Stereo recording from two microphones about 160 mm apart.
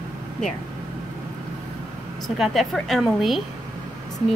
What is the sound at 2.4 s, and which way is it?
Speech, centre (ahead or behind).